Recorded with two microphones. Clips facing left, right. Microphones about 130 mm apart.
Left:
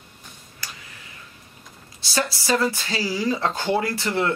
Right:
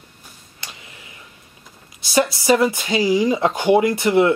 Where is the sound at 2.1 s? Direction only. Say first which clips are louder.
Right 7 dB; 20° right (ahead or behind).